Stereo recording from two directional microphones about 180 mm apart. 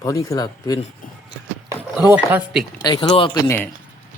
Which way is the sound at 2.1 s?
10° right (ahead or behind).